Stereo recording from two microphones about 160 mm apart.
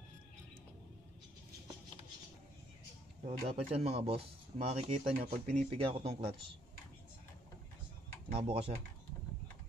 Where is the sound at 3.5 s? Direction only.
40° right (ahead or behind).